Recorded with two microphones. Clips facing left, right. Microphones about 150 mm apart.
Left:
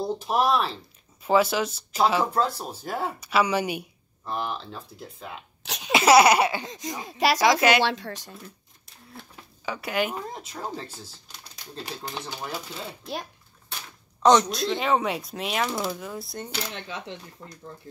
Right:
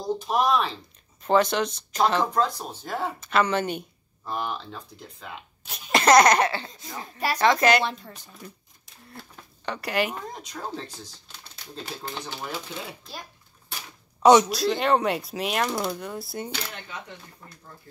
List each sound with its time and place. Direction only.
0.2 s speech: 5° left (ahead or behind)
5.6 s cough: 90° left
5.9 s speech: 5° left (ahead or behind)
7.1 s a woman's voice: 90° left
8.4 s a sound: centre (ahead or behind)
9.7 s speech: centre (ahead or behind)
14.2 s speech: 5° right (ahead or behind)